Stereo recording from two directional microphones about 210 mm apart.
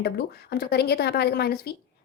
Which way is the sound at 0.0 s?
50° left (ahead or behind).